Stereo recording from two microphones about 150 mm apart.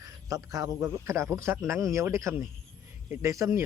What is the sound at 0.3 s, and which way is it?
A man's voice, 20° right (ahead or behind).